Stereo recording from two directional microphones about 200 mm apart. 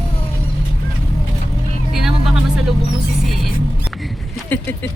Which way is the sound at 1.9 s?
Centre (ahead or behind).